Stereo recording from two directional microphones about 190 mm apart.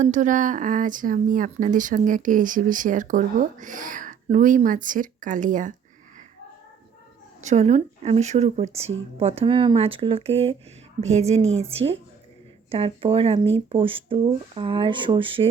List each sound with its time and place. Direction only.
0.0 s speech: 40° right (ahead or behind)
7.4 s speech: 35° right (ahead or behind)
12.7 s speech: 30° right (ahead or behind)